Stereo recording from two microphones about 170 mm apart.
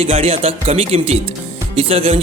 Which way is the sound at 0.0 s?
35° right (ahead or behind).